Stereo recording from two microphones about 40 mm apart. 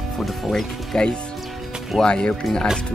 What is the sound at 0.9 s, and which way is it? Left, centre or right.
Speech, centre.